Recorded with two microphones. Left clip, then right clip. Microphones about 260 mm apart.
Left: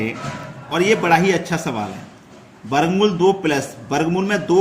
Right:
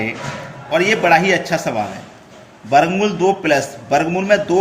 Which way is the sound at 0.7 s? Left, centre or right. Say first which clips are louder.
Right 3 dB; centre.